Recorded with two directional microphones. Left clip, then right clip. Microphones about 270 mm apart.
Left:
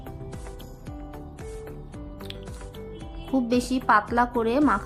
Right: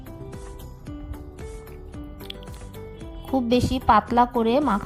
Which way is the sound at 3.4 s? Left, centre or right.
Right.